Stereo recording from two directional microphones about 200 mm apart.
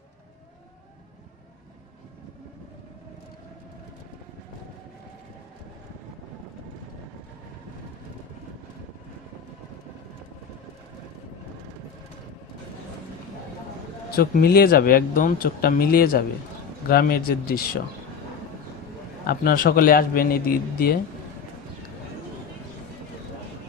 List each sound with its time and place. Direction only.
14.1 s speech: 50° left (ahead or behind)
19.2 s speech: 45° left (ahead or behind)